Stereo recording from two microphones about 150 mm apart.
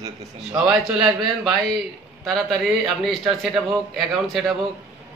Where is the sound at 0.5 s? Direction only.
5° right (ahead or behind).